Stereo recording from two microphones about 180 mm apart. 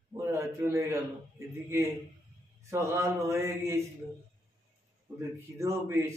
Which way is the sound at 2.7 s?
15° right (ahead or behind).